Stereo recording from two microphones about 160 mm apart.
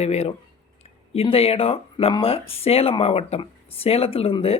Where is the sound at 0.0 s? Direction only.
40° left (ahead or behind).